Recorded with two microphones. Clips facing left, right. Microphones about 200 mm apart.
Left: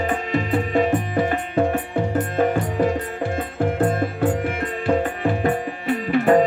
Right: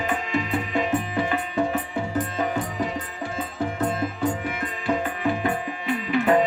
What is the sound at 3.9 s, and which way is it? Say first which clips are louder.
Music: left 4 dB; 55° left (ahead or behind).